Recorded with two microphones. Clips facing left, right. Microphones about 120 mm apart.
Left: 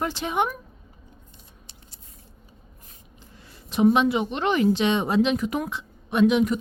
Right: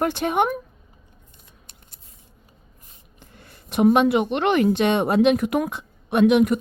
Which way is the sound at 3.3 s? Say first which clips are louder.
Right 3 dB; 60° right (ahead or behind).